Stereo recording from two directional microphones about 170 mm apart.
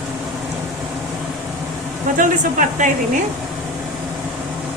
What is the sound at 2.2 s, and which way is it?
Speech, 50° right (ahead or behind).